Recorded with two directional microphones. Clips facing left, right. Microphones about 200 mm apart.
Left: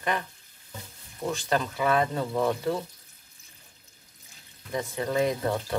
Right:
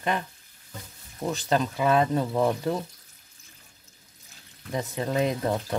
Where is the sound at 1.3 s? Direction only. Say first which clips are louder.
Right 2 dB; 20° right (ahead or behind).